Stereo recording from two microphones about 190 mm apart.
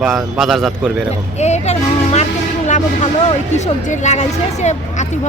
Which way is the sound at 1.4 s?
35° left (ahead or behind).